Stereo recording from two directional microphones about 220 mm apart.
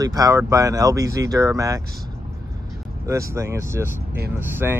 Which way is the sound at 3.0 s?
15° right (ahead or behind).